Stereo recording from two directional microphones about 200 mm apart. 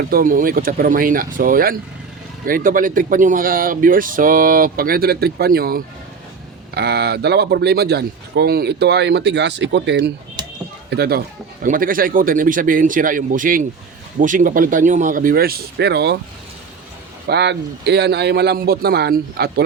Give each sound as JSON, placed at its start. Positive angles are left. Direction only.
{"t": 0.1, "sound": "a man's voice", "side_deg": -45}
{"t": 11.6, "sound": "speech", "side_deg": -45}
{"t": 17.2, "sound": "a man's voice", "side_deg": -60}